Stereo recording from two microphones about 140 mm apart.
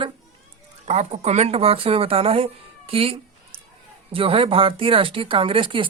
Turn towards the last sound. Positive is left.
turn(degrees=-35)  # may be behind; listen again after turning